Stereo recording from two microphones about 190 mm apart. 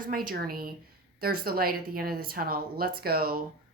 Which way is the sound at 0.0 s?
50° right (ahead or behind).